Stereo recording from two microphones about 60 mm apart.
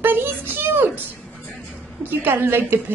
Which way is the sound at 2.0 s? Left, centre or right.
Right.